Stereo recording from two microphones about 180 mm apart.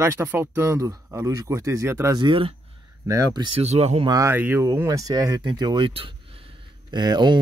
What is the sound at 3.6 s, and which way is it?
Speech, 35° right (ahead or behind).